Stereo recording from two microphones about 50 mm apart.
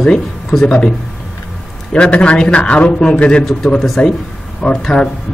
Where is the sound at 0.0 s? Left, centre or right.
Centre.